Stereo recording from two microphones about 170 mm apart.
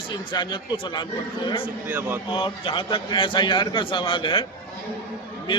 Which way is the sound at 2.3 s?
35° left (ahead or behind).